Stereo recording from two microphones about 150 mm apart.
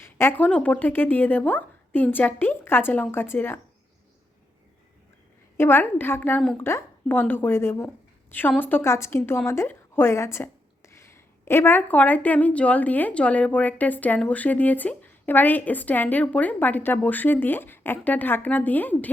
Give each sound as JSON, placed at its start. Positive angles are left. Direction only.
{"t": 0.2, "sound": "a woman's voice", "side_deg": 10}
{"t": 5.5, "sound": "a woman's voice", "side_deg": 15}